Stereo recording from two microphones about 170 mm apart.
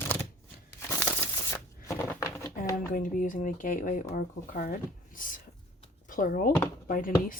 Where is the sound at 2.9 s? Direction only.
50° left (ahead or behind).